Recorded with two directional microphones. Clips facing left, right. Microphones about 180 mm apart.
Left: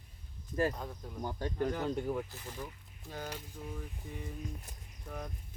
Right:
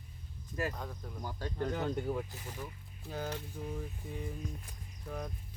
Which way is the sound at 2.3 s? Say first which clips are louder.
Even; 15° right (ahead or behind).